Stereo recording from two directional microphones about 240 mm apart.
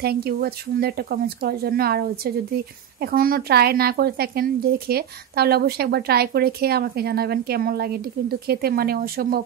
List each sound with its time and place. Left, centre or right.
0.0 s speech: right